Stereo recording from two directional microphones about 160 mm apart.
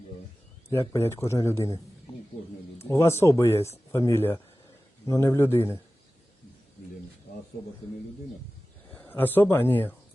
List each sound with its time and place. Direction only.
0.7 s speech: 15° left (ahead or behind)
2.9 s speech: 15° left (ahead or behind)
8.9 s speech: 10° left (ahead or behind)